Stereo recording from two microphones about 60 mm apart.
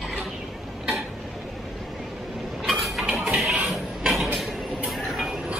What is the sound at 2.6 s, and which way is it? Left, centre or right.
Dishes, centre.